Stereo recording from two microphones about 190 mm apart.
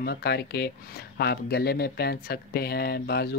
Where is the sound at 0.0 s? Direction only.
55° left (ahead or behind).